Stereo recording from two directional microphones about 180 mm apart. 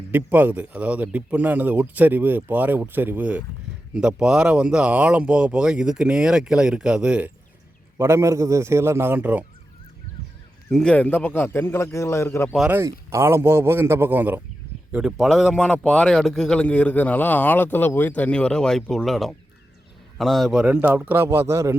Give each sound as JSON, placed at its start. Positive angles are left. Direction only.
{"t": 0.1, "sound": "a man's voice", "side_deg": -10}
{"t": 10.7, "sound": "a man's voice", "side_deg": 5}
{"t": 12.5, "sound": "a man's voice", "side_deg": -10}